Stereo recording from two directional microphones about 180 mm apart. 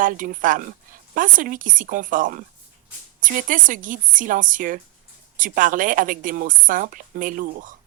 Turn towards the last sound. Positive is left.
turn(degrees=-50)  # may be behind; listen again after turning